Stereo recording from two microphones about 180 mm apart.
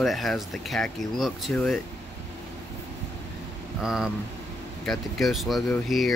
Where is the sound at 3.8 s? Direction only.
5° right (ahead or behind).